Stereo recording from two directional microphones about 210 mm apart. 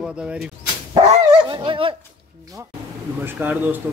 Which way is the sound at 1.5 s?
25° right (ahead or behind).